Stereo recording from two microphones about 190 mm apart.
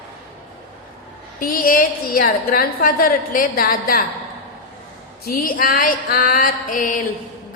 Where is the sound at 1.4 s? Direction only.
50° left (ahead or behind).